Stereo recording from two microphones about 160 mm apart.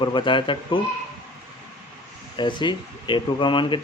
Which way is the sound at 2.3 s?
30° left (ahead or behind).